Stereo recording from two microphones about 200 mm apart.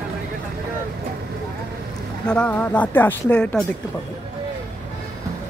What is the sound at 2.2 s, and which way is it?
Speech, 5° left (ahead or behind).